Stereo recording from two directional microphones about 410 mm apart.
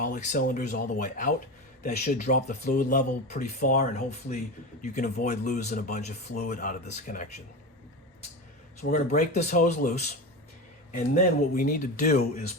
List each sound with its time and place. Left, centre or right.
0.0 s speech: centre
8.8 s speech: centre